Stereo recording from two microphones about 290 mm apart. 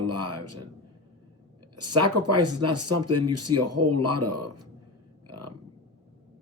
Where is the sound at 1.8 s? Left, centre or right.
Right.